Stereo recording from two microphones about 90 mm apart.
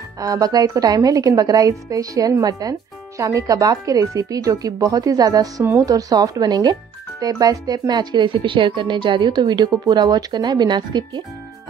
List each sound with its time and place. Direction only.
0.2 s speech: 45° right (ahead or behind)